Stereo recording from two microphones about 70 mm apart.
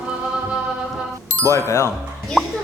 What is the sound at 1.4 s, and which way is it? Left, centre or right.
Speech, left.